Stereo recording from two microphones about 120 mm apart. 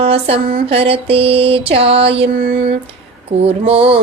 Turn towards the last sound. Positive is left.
turn(degrees=-55)  # may be behind; listen again after turning